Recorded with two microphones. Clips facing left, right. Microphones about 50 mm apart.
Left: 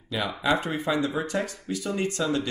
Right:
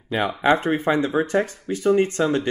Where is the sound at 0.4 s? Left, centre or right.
Right.